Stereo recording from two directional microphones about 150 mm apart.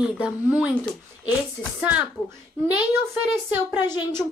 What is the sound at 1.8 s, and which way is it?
A child's voice, 10° right (ahead or behind).